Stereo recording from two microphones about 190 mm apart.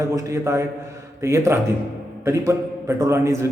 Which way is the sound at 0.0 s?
15° right (ahead or behind).